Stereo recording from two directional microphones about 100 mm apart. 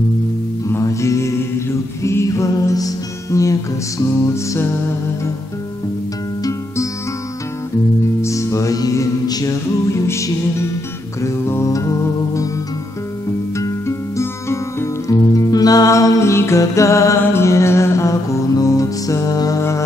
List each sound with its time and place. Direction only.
0.7 s music: 30° left (ahead or behind)
8.2 s music: 30° left (ahead or behind)
13.6 s music: 30° left (ahead or behind)